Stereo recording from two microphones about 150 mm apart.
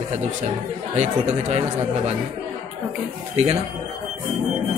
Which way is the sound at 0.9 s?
50° right (ahead or behind).